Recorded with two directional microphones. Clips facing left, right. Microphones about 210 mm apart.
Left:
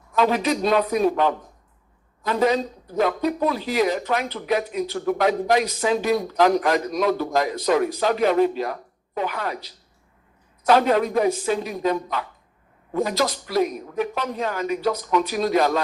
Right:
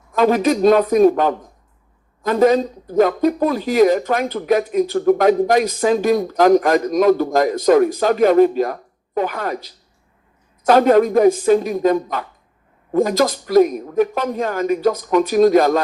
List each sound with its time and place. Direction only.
0.1 s speech: 45° right (ahead or behind)